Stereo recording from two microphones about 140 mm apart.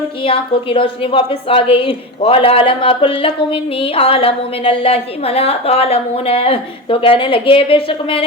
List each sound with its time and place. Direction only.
0.2 s a woman's voice: 40° left (ahead or behind)